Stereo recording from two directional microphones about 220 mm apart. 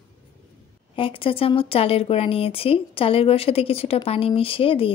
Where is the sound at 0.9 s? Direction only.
25° left (ahead or behind).